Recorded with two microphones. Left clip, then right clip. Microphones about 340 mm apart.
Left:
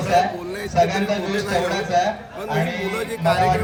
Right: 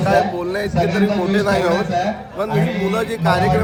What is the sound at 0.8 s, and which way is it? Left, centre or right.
Speech, left.